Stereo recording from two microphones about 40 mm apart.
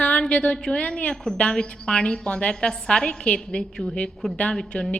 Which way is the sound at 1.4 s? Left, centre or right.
Left.